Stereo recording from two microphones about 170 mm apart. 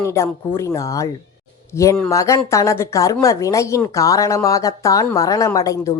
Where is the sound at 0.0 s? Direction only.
15° left (ahead or behind).